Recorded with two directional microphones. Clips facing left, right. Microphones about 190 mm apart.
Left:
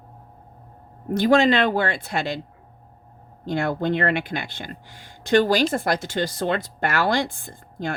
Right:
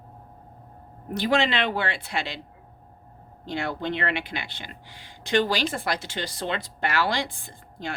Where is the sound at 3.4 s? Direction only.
50° left (ahead or behind).